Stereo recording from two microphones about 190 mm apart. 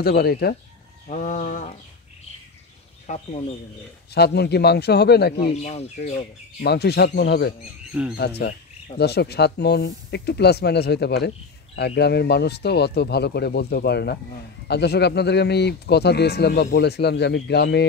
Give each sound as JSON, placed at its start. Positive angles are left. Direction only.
{"t": 0.0, "sound": "speech", "side_deg": 55}
{"t": 1.0, "sound": "speech", "side_deg": 40}
{"t": 3.1, "sound": "speech", "side_deg": 40}
{"t": 4.1, "sound": "speech", "side_deg": 60}
{"t": 5.5, "sound": "speech", "side_deg": 35}
{"t": 6.6, "sound": "speech", "side_deg": 60}
{"t": 7.9, "sound": "speech", "side_deg": -5}
{"t": 8.4, "sound": "speech", "side_deg": 60}